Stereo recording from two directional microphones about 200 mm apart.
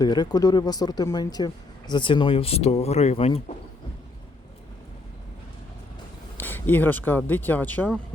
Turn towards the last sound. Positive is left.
turn(degrees=10)  # may be behind; listen again after turning